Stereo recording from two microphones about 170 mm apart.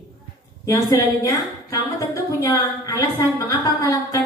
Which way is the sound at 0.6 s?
20° left (ahead or behind).